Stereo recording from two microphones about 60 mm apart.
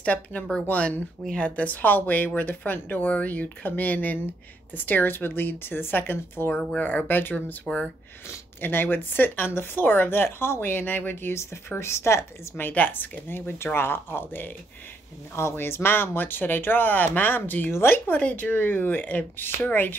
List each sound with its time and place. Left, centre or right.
0.0 s speech: left
6.5 s speech: centre
6.8 s speech: left
8.5 s a woman's voice: left
12.6 s speech: left